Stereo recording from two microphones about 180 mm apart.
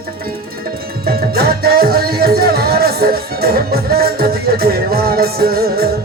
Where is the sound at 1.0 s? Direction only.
55° right (ahead or behind).